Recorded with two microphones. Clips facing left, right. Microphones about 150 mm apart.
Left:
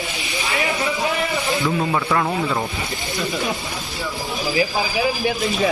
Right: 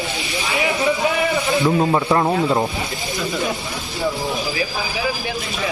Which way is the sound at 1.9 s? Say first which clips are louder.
Right 3 dB; 25° right (ahead or behind).